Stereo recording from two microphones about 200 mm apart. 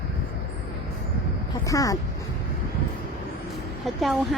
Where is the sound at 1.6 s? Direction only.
15° left (ahead or behind).